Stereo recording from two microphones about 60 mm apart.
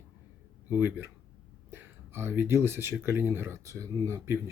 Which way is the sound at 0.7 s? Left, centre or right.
Right.